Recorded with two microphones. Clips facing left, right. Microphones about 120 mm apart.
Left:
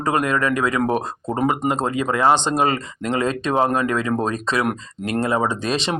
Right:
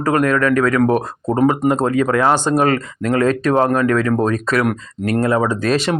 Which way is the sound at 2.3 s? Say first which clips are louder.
Right 3 dB; 20° left (ahead or behind).